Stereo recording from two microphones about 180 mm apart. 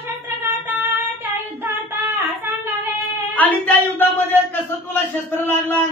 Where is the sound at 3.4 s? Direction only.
10° left (ahead or behind).